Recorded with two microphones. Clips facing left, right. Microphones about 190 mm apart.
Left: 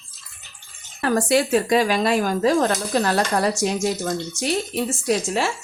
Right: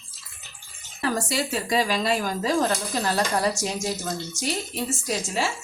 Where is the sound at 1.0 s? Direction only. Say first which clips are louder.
Left 7 dB; 55° left (ahead or behind).